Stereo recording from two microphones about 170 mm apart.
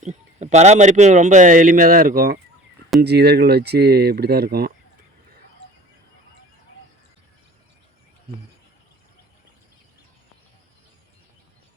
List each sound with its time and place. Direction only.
0.0 s speech: 45° right (ahead or behind); by 2.4 s 60° right (ahead or behind)
3.0 s speech: 75° right (ahead or behind)